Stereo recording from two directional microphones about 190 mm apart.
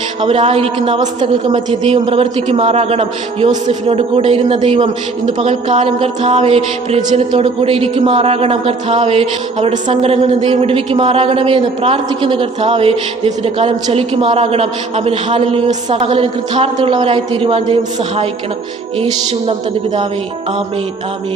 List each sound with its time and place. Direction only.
0.2 s music: 30° right (ahead or behind)
1.5 s a man's voice: 25° right (ahead or behind)
5.2 s music: 30° right (ahead or behind)